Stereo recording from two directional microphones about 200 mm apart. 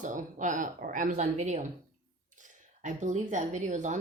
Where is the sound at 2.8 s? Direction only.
35° right (ahead or behind).